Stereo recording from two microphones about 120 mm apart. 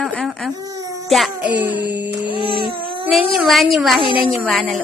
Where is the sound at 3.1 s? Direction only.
Centre (ahead or behind).